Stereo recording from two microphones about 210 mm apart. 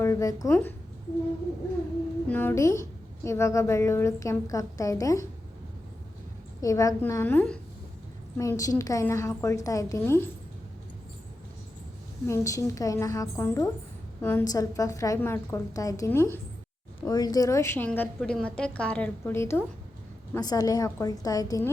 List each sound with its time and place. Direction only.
0.0 s a woman's voice: 15° left (ahead or behind)
2.2 s a woman's voice: 10° left (ahead or behind)
6.6 s a woman's voice: 15° left (ahead or behind)
12.3 s a woman's voice: 15° left (ahead or behind)